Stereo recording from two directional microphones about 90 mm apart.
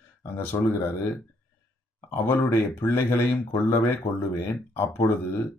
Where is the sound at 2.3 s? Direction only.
25° left (ahead or behind).